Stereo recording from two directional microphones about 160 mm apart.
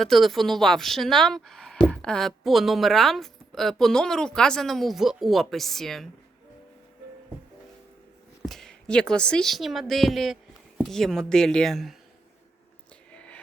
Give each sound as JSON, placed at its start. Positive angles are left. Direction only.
{"t": 0.0, "sound": "speech", "side_deg": 0}
{"t": 8.4, "sound": "a woman's voice", "side_deg": 0}
{"t": 13.1, "sound": "a sound", "side_deg": 5}